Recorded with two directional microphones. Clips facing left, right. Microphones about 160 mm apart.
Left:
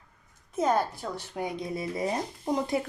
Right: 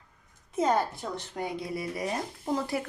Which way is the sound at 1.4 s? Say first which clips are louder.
Left 1 dB; 15° left (ahead or behind).